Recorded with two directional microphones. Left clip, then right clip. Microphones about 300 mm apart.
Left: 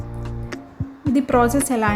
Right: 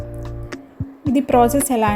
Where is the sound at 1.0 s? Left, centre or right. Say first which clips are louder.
Right 3 dB; centre.